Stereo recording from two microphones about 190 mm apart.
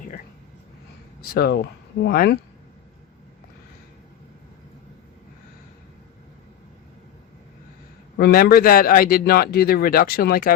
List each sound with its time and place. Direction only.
1.2 s a man's voice: 55° left (ahead or behind)
8.2 s a man's voice: 55° left (ahead or behind)